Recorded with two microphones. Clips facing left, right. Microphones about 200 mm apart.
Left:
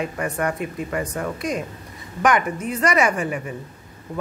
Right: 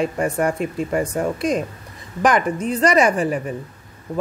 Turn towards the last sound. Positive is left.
turn(degrees=-35)  # may be behind; listen again after turning